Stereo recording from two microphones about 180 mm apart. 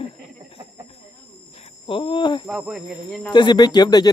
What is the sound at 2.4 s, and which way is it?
Speech, 5° right (ahead or behind).